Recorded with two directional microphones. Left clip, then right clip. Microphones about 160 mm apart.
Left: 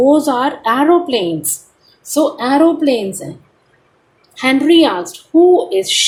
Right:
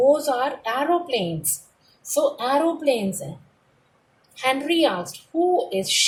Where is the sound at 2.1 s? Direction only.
35° left (ahead or behind).